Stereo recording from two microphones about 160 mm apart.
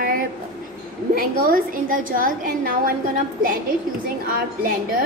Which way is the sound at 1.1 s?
60° right (ahead or behind).